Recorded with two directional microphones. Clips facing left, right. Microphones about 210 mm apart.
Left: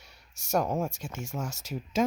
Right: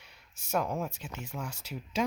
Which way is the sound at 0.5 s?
45° left (ahead or behind).